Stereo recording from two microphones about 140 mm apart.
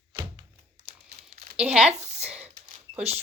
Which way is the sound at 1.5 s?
5° right (ahead or behind).